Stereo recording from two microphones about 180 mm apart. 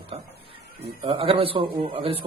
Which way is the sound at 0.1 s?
35° right (ahead or behind).